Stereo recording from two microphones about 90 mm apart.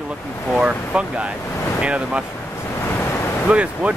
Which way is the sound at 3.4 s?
15° right (ahead or behind).